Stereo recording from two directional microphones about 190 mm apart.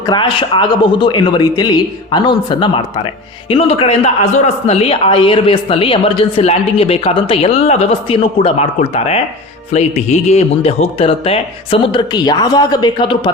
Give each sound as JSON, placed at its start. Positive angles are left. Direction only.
{"t": 0.0, "sound": "a man's voice", "side_deg": 25}
{"t": 9.7, "sound": "a man's voice", "side_deg": 35}